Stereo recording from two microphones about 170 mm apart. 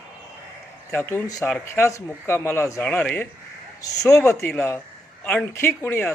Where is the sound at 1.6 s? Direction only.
15° left (ahead or behind).